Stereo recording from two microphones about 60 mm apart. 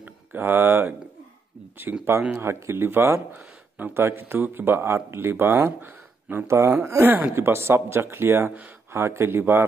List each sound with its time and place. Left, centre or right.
0.0 s speech: right
1.9 s speech: right
2.3 s speech: right
3.3 s a sound: right
3.9 s speech: right
6.4 s speech: right
7.1 s speech: right